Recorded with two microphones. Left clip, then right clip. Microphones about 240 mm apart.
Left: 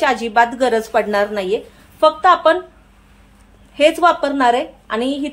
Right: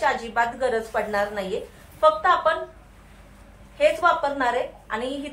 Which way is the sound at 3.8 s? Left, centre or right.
Left.